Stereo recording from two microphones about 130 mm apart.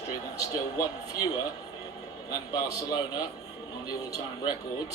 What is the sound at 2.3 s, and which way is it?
Speech, 30° left (ahead or behind).